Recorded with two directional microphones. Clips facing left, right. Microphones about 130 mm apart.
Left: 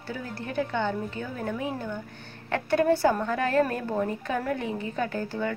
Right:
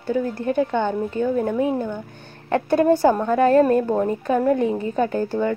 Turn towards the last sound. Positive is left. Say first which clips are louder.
# right 8 dB
turn(degrees=-40)  # may be behind; listen again after turning